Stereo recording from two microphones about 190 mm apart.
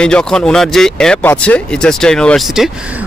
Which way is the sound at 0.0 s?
5° left (ahead or behind).